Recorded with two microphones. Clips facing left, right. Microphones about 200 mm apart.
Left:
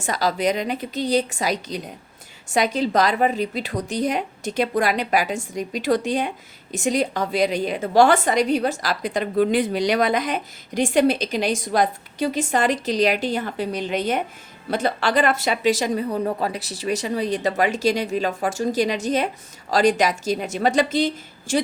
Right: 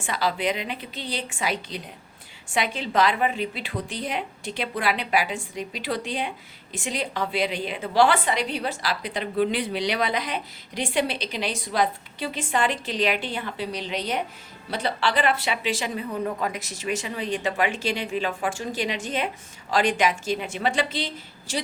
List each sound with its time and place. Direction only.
0.0 s a woman's voice: 40° left (ahead or behind)